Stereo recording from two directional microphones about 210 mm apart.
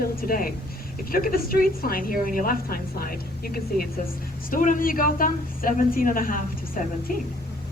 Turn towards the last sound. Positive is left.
turn(degrees=40)  # may be behind; listen again after turning